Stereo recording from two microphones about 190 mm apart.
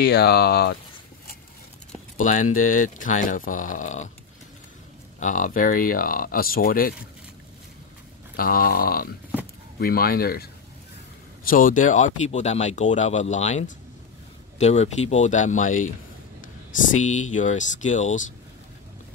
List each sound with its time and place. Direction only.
0.0 s speech: 60° left (ahead or behind)
2.1 s speech: 40° left (ahead or behind)
5.2 s speech: 45° left (ahead or behind)
8.4 s speech: 50° left (ahead or behind)
17.0 s speech: 40° left (ahead or behind)